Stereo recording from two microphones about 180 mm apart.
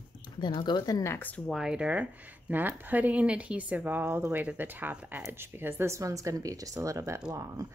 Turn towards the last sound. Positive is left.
turn(degrees=-15)  # may be behind; listen again after turning